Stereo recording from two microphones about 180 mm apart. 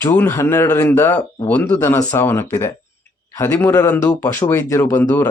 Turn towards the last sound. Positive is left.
turn(degrees=10)  # may be behind; listen again after turning